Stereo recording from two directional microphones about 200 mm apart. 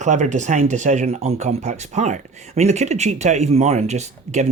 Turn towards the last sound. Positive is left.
turn(degrees=-35)  # may be behind; listen again after turning